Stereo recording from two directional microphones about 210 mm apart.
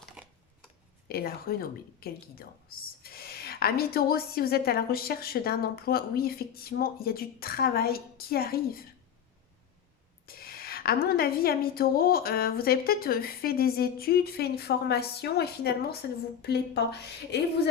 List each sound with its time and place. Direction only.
0.2 s a sound: 5° right (ahead or behind)
1.0 s speech: 45° left (ahead or behind)
10.2 s speech: 45° left (ahead or behind)